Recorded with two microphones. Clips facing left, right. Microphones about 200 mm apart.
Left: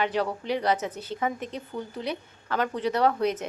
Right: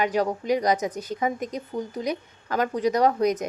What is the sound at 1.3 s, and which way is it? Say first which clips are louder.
Speech: right 4 dB; 40° right (ahead or behind).